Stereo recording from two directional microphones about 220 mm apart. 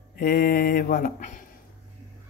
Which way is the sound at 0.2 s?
40° left (ahead or behind).